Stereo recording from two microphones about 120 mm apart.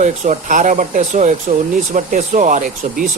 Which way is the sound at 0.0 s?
85° right.